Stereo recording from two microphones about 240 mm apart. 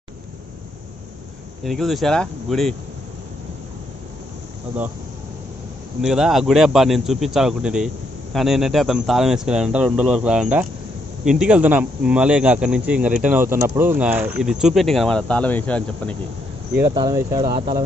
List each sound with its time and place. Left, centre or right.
1.6 s speech: centre
5.9 s speech: centre
16.9 s speech: centre